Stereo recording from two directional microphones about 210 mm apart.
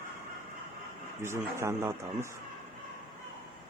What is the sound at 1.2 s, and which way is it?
Speech, 15° right (ahead or behind).